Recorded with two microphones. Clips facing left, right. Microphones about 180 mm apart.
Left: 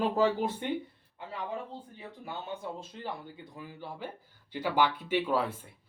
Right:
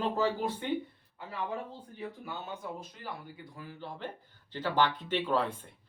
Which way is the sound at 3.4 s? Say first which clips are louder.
Left 1 dB; 15° left (ahead or behind).